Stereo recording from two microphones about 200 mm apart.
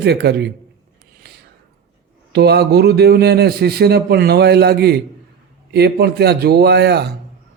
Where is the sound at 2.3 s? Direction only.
55° right (ahead or behind).